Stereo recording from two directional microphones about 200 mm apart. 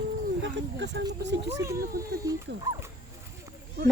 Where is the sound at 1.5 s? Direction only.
15° right (ahead or behind).